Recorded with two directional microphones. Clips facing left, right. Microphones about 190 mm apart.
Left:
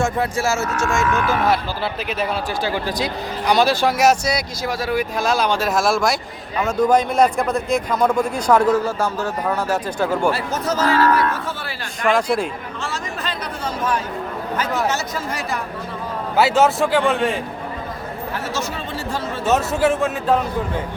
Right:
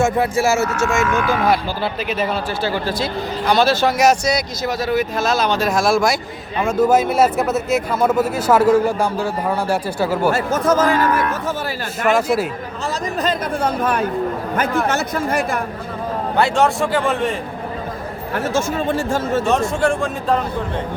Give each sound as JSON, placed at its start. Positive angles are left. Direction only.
{"t": 0.0, "sound": "speech", "side_deg": -5}
{"t": 2.1, "sound": "a man's voice", "side_deg": 10}
{"t": 10.3, "sound": "speech", "side_deg": -50}
{"t": 10.8, "sound": "a man's voice", "side_deg": -15}
{"t": 12.8, "sound": "speech", "side_deg": -40}
{"t": 16.3, "sound": "speech", "side_deg": 5}
{"t": 18.3, "sound": "speech", "side_deg": -50}
{"t": 19.5, "sound": "speech", "side_deg": 5}